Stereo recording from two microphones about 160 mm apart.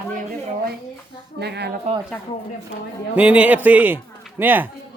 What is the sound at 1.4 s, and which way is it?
Speech, 90° right.